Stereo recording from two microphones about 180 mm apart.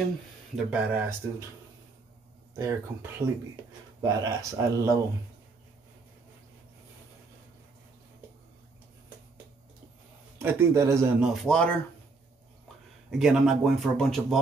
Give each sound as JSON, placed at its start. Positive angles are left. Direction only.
{"t": 0.7, "sound": "speech", "side_deg": -10}
{"t": 2.5, "sound": "speech", "side_deg": -15}
{"t": 10.4, "sound": "speech", "side_deg": -15}
{"t": 11.1, "sound": "speech", "side_deg": 0}
{"t": 13.1, "sound": "speech", "side_deg": -5}